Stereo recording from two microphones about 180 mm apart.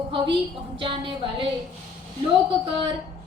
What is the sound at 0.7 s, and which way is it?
Speech, 30° right (ahead or behind).